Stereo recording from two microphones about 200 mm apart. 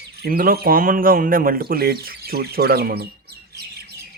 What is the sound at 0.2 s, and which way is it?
Speech, 45° right (ahead or behind).